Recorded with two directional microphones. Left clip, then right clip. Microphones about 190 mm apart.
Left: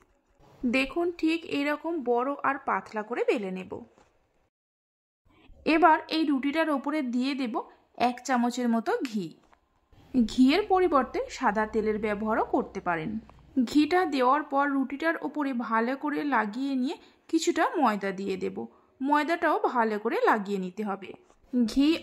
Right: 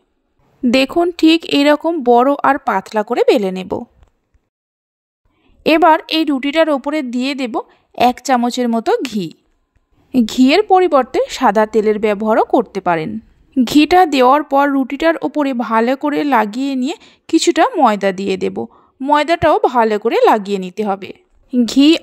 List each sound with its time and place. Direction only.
0.7 s speech: 45° right (ahead or behind)
5.6 s speech: 40° right (ahead or behind)